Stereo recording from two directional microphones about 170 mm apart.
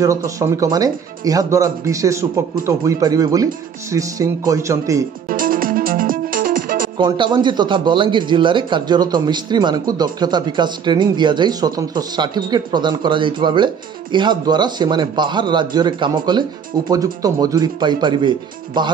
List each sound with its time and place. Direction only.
0.0 s speech: 20° right (ahead or behind)
5.3 s music: 55° right (ahead or behind)
7.0 s speech: 25° right (ahead or behind)